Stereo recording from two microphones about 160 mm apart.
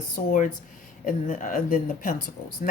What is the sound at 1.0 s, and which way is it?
Speech, 55° left (ahead or behind).